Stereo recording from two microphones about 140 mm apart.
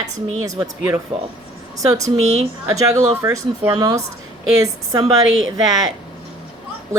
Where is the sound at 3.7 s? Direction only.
30° right (ahead or behind).